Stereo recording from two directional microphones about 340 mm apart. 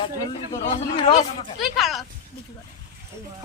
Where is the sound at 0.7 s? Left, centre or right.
Centre.